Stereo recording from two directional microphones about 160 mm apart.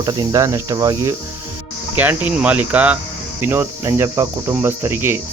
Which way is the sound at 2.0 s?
10° right (ahead or behind).